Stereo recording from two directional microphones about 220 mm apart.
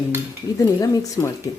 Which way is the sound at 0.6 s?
15° left (ahead or behind).